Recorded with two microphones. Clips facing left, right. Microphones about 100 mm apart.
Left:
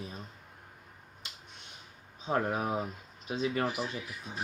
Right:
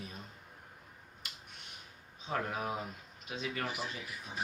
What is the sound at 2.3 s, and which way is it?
Speech, 35° left (ahead or behind).